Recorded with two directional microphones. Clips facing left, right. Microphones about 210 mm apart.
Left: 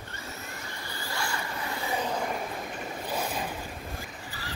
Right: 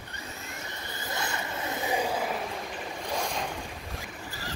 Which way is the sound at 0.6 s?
20° right (ahead or behind).